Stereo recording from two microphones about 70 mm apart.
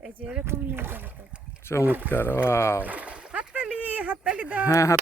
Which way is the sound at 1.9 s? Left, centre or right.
Right.